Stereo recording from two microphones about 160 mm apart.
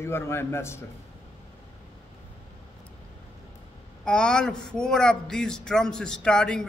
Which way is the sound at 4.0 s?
5° left (ahead or behind).